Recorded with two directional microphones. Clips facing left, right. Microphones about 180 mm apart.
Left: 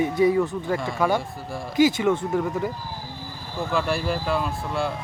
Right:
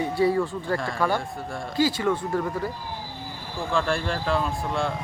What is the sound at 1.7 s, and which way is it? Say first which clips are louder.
Speech: left 4 dB; 20° left (ahead or behind).